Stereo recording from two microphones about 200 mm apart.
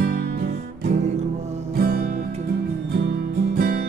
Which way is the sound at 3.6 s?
50° right (ahead or behind).